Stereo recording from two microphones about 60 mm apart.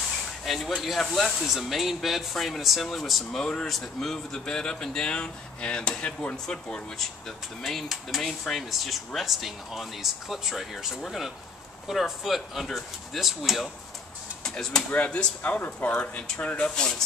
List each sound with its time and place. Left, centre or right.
0.5 s speech: centre
14.4 s speech: centre